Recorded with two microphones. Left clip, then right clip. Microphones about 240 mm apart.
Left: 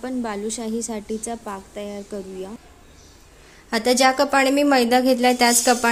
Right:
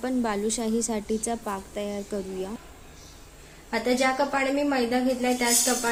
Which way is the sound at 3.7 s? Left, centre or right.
Left.